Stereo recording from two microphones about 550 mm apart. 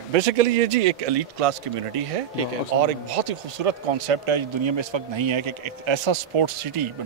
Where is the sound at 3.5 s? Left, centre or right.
Right.